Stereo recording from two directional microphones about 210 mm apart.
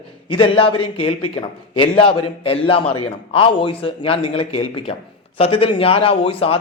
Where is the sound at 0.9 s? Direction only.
90° left.